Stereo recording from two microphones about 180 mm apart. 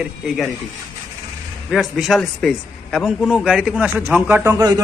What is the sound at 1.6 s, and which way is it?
A man's voice, centre (ahead or behind).